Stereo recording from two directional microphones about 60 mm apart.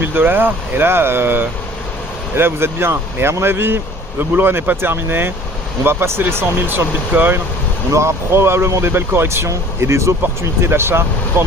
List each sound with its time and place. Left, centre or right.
0.0 s speech: right
7.9 s speech: right